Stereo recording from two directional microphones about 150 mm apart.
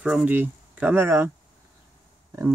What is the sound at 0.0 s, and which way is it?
Speech, 5° right (ahead or behind).